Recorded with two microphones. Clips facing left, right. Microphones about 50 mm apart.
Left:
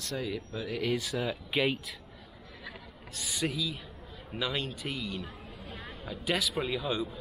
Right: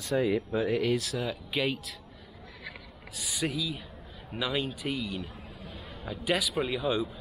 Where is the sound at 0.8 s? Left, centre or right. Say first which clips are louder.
Right 2 dB; centre.